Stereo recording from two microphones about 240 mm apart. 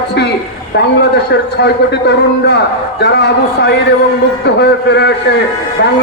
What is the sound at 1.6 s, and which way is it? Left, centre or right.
Speech, left.